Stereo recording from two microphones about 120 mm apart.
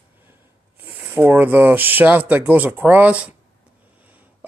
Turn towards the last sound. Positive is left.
turn(degrees=-10)  # may be behind; listen again after turning